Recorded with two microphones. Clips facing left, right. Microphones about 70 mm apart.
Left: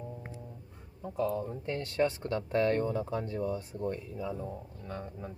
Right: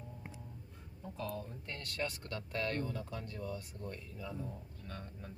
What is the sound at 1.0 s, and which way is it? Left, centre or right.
Speech, centre.